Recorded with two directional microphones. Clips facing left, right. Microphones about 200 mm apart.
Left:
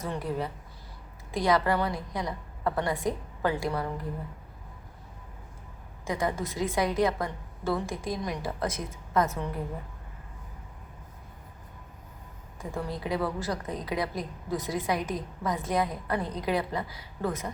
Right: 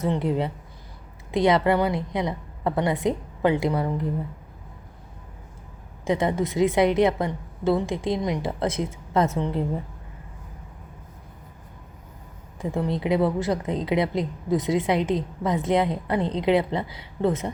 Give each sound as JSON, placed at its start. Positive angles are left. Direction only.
{"t": 0.0, "sound": "a woman's voice", "side_deg": -25}
{"t": 6.1, "sound": "a woman's voice", "side_deg": -25}
{"t": 12.5, "sound": "a woman's voice", "side_deg": -20}